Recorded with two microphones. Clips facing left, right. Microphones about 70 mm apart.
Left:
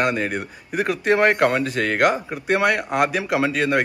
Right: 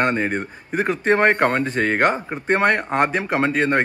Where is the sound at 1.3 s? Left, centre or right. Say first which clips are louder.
Even; right.